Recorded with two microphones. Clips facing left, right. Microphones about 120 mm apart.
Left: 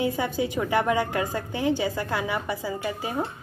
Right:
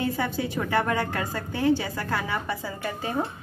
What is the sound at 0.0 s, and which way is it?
A woman's voice, 15° left (ahead or behind).